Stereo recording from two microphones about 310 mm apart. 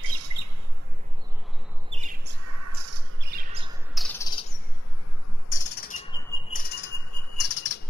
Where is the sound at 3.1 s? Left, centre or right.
Right.